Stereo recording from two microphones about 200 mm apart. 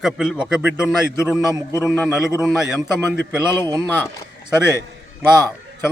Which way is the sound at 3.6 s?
15° right (ahead or behind).